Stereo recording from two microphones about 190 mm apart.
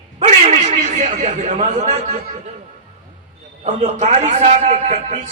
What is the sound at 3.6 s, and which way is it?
A man's voice, 40° right (ahead or behind).